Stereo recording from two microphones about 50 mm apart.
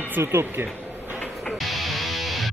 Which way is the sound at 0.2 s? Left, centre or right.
Right.